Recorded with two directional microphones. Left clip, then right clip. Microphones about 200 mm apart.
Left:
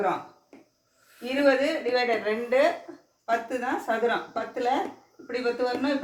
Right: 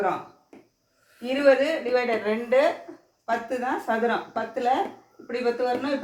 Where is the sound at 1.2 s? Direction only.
15° right (ahead or behind).